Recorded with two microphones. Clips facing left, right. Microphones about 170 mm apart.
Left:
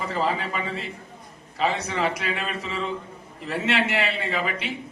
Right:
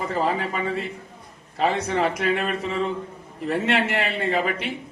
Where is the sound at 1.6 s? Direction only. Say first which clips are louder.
Right 3 dB; 50° right (ahead or behind).